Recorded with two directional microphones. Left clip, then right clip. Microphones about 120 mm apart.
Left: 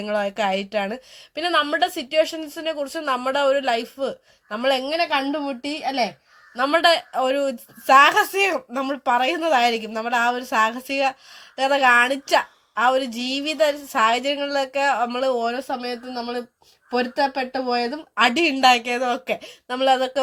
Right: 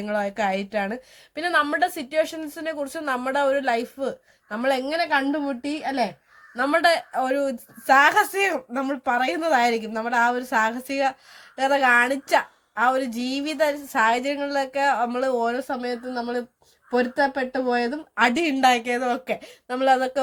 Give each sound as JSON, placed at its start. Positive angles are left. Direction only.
{"t": 0.0, "sound": "a woman's voice", "side_deg": 30}